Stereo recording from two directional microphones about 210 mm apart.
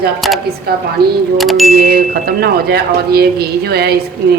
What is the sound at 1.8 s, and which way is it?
Speech, 45° right (ahead or behind).